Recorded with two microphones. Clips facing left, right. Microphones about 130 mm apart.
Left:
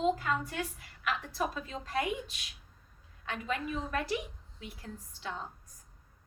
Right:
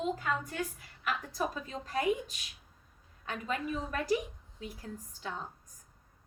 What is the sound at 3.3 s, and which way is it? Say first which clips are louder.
Speech: even; 40° right (ahead or behind).